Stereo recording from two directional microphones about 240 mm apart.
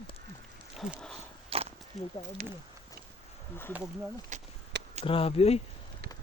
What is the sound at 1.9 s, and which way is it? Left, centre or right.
Speech, centre.